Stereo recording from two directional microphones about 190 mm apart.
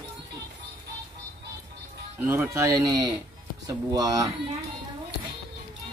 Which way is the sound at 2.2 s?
10° right (ahead or behind).